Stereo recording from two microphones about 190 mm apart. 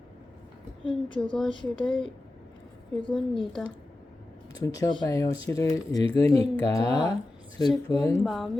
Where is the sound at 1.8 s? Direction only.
Centre (ahead or behind).